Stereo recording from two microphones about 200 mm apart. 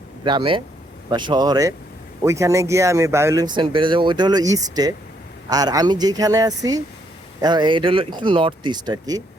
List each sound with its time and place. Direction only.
0.3 s speech: 25° right (ahead or behind)